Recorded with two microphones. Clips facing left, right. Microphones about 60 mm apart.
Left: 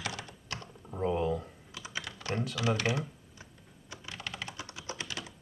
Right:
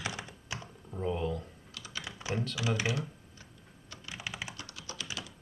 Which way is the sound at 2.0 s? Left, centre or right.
Centre.